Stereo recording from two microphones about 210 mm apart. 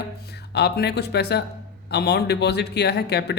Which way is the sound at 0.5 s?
50° left (ahead or behind).